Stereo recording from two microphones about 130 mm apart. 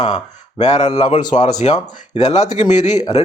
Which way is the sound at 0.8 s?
55° left (ahead or behind).